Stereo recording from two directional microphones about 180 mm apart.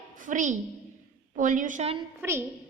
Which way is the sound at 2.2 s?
15° right (ahead or behind).